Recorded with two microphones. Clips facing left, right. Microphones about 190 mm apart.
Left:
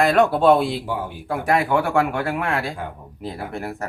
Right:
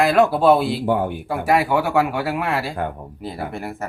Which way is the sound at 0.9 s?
55° right (ahead or behind).